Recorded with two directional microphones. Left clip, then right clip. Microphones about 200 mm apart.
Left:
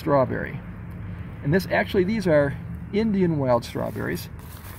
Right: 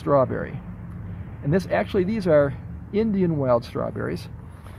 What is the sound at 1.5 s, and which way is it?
Speech, 15° right (ahead or behind).